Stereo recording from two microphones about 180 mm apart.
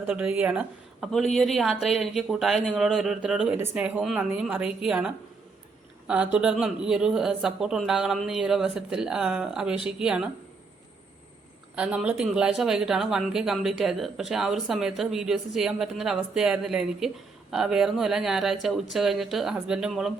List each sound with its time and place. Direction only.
0.0 s a woman's voice: 10° right (ahead or behind)
11.7 s speech: 5° right (ahead or behind)